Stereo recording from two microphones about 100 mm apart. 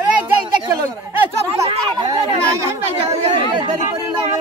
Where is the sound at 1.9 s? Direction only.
50° right (ahead or behind).